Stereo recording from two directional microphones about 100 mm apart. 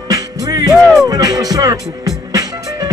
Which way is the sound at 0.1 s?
40° right (ahead or behind).